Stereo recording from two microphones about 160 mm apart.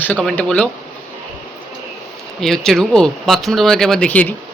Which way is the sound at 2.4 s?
Centre (ahead or behind).